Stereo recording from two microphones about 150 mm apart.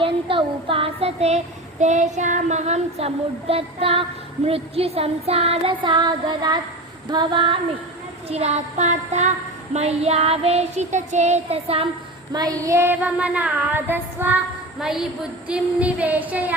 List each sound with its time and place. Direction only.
0.0 s music: 35° right (ahead or behind)
1.8 s child singing: 50° right (ahead or behind)
4.4 s music: 40° right (ahead or behind)
8.3 s child singing: 45° right (ahead or behind)
12.3 s child singing: 25° right (ahead or behind)